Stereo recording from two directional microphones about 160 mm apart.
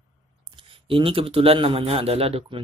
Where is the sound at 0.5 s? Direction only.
35° right (ahead or behind).